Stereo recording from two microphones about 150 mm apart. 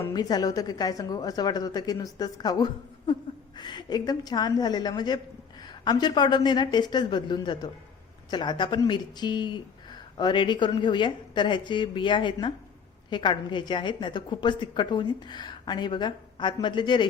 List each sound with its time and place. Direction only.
0.1 s a woman's voice: 25° left (ahead or behind)